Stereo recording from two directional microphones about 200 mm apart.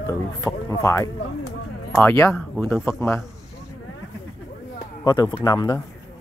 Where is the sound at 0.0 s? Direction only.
15° left (ahead or behind).